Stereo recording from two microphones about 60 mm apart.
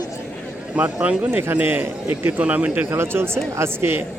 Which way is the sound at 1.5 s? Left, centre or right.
Right.